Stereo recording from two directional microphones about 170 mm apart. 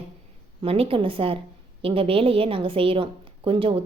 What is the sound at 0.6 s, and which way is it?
A woman's voice, 35° right (ahead or behind).